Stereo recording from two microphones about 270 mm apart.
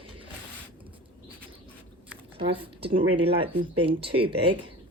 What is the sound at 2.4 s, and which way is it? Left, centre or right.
Speech, centre.